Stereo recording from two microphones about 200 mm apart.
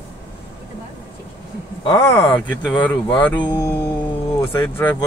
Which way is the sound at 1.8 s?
20° left (ahead or behind).